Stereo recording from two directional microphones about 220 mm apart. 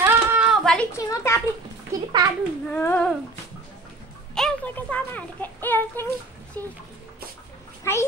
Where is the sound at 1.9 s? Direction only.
15° right (ahead or behind).